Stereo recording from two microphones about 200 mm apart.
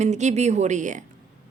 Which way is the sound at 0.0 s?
35° right (ahead or behind).